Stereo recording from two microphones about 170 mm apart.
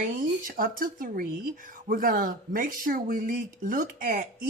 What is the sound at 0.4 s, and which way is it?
Speech, 55° right (ahead or behind).